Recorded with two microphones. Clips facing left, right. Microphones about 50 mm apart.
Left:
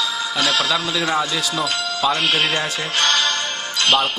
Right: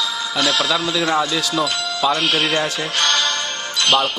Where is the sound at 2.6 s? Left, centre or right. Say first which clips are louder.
Even; left.